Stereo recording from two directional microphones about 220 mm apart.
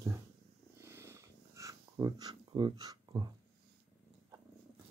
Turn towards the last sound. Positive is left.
turn(degrees=-20)  # may be behind; listen again after turning